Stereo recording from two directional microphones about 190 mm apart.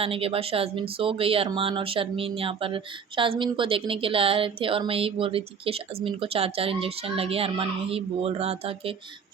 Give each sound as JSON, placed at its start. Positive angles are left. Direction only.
{"t": 0.0, "sound": "speech", "side_deg": -30}